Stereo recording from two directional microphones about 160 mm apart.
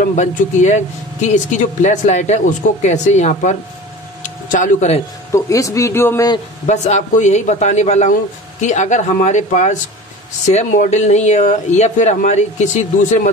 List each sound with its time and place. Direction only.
0.0 s speech: 50° left (ahead or behind)
4.2 s a sound: 50° left (ahead or behind)
5.3 s speech: 20° left (ahead or behind)
6.6 s speech: 50° left (ahead or behind)